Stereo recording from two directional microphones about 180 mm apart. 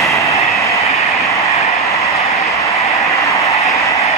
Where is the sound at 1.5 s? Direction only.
35° left (ahead or behind).